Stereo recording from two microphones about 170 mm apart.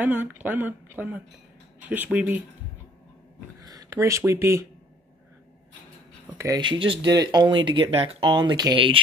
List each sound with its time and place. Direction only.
0.0 s speech: 10° right (ahead or behind)
3.6 s speech: 20° right (ahead or behind)
6.3 s speech: 20° right (ahead or behind)